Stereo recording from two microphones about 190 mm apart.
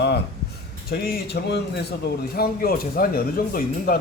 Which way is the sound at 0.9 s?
55° left (ahead or behind).